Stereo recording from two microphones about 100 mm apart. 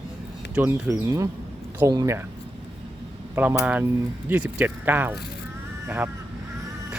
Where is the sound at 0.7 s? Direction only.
30° right (ahead or behind).